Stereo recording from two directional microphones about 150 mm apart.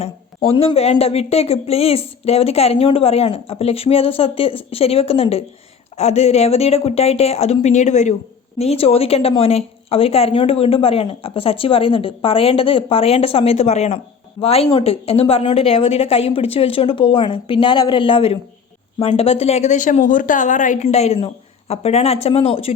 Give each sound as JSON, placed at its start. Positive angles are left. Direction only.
{"t": 0.5, "sound": "a woman's voice", "side_deg": 40}